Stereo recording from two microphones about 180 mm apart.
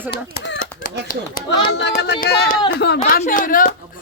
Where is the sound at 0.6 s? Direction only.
50° left (ahead or behind).